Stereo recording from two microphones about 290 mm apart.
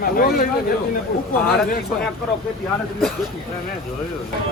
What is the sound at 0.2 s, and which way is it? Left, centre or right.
Speech, left.